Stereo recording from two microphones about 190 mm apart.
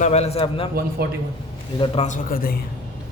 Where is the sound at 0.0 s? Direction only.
35° left (ahead or behind).